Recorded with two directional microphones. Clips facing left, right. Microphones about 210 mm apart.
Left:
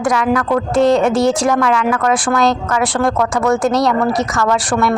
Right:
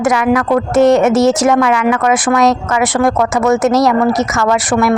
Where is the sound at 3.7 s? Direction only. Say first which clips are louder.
Right 3 dB; centre (ahead or behind).